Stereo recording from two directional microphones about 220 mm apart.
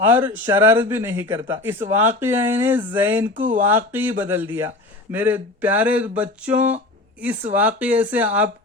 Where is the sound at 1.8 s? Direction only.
30° right (ahead or behind).